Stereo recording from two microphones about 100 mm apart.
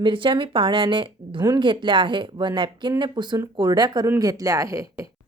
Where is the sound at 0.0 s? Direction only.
55° right (ahead or behind).